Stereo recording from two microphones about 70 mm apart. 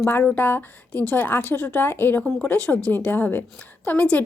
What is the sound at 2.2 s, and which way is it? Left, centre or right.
A woman's voice, centre.